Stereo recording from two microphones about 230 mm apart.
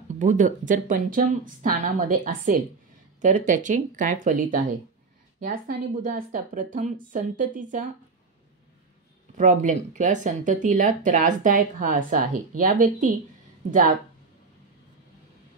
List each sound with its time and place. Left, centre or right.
0.2 s speech: right
9.4 s speech: right